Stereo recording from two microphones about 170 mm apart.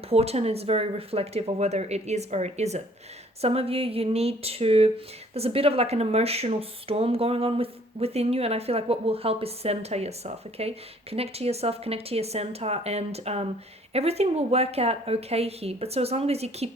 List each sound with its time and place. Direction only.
0.1 s speech: 35° right (ahead or behind)